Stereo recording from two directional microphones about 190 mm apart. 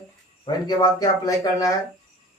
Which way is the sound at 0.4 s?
20° left (ahead or behind).